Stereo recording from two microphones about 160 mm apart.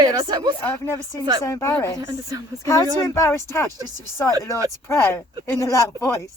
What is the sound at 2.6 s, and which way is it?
Speech, 20° left (ahead or behind).